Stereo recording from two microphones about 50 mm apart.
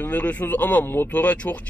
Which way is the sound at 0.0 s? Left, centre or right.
Left.